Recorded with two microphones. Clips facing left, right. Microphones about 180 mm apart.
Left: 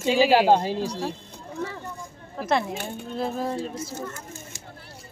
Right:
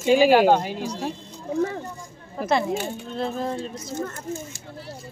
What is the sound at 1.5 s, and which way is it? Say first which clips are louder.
Speech: right 8 dB; 45° right (ahead or behind).